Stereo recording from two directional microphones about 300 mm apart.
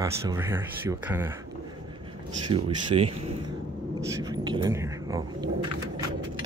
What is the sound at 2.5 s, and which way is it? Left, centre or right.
Speech, centre.